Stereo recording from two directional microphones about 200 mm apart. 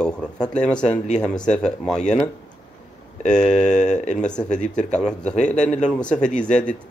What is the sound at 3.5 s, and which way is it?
Speech, 35° left (ahead or behind).